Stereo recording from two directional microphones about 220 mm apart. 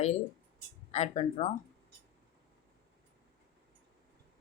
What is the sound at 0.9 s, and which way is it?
Speech, 30° left (ahead or behind).